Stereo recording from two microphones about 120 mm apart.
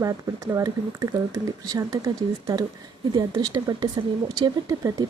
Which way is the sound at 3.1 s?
35° right (ahead or behind).